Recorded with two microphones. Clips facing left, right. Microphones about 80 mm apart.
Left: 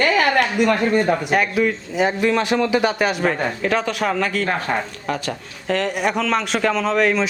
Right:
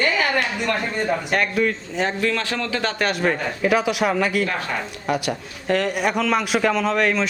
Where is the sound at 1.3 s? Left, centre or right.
Centre.